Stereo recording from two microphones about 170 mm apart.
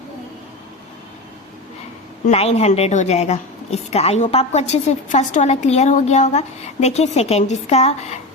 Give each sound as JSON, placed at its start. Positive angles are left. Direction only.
{"t": 2.2, "sound": "a woman's voice", "side_deg": 40}